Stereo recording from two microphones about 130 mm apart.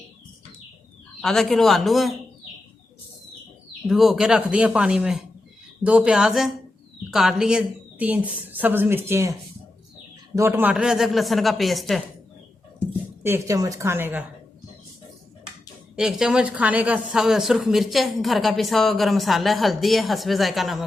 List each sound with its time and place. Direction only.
1.2 s speech: 5° left (ahead or behind)
3.8 s a woman's voice: centre (ahead or behind); by 9.3 s 20° right (ahead or behind)
10.3 s speech: 20° right (ahead or behind); by 12.0 s centre (ahead or behind)
13.2 s a woman's voice: 20° right (ahead or behind)
16.0 s speech: 5° right (ahead or behind)